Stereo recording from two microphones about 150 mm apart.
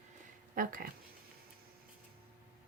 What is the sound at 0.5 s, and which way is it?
Speech, 65° right (ahead or behind).